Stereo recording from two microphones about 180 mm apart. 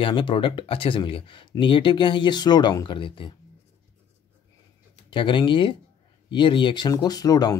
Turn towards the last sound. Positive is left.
turn(degrees=20)  # may be behind; listen again after turning